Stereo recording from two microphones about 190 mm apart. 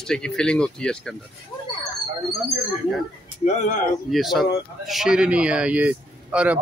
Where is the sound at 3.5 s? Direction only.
40° left (ahead or behind).